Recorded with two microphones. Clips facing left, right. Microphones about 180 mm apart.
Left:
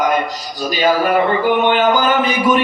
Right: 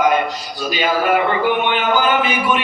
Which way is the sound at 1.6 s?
40° left (ahead or behind).